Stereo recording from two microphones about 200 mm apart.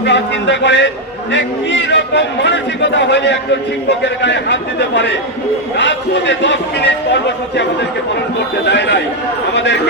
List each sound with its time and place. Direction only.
0.0 s a man's voice: 60° left (ahead or behind)